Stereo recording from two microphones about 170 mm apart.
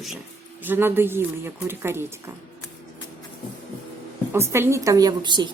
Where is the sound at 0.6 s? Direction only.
10° right (ahead or behind).